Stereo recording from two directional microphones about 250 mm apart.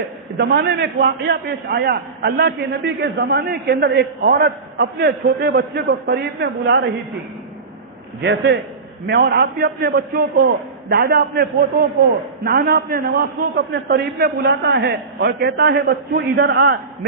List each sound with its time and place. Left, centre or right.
0.3 s a man's voice: right
8.2 s a man's voice: right